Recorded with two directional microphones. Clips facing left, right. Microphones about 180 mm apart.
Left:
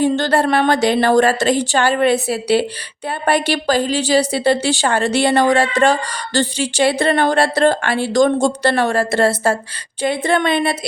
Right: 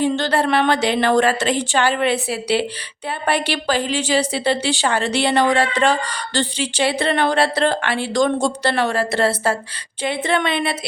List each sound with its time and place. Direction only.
0.0 s a woman's voice: 45° left (ahead or behind)